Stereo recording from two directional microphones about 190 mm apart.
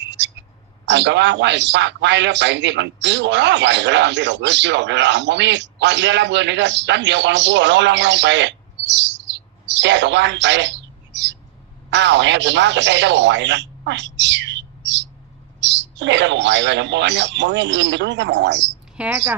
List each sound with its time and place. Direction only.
0.0 s a sound: 65° right (ahead or behind)
0.9 s a man's voice: 65° right (ahead or behind)
18.9 s a woman's voice: 10° right (ahead or behind)